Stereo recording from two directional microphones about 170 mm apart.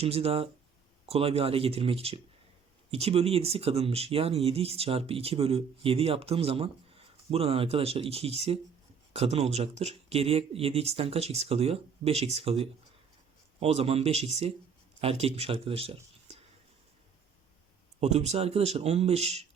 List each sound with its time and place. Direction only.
0.0 s speech: 35° right (ahead or behind)
18.0 s speech: 40° right (ahead or behind)